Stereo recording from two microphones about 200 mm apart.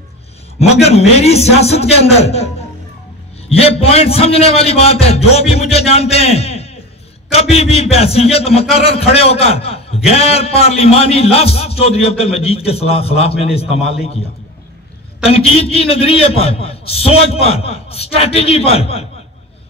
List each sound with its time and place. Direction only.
0.6 s a man's voice: 30° left (ahead or behind)
15.2 s a man's voice: 30° left (ahead or behind)